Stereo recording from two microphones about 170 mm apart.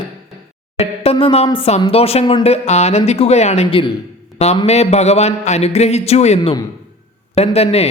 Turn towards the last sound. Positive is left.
turn(degrees=35)  # may be behind; listen again after turning